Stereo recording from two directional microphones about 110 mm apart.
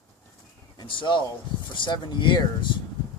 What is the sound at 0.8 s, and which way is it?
Speech, 45° left (ahead or behind).